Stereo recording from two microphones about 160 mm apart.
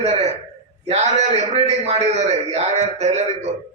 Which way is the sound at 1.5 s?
40° right (ahead or behind).